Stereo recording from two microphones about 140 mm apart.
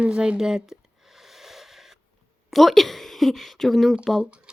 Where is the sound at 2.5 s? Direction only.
Centre (ahead or behind).